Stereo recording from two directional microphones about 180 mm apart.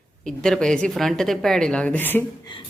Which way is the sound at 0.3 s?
5° left (ahead or behind).